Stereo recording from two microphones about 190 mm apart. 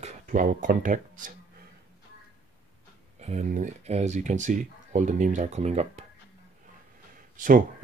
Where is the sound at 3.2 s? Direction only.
40° right (ahead or behind).